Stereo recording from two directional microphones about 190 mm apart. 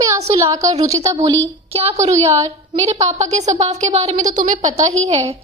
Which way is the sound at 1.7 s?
35° right (ahead or behind).